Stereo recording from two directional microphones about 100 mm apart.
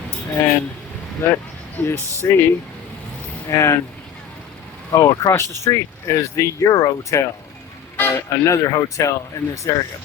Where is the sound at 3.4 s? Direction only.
30° left (ahead or behind).